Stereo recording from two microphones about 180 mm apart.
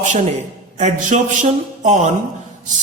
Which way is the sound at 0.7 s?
40° right (ahead or behind).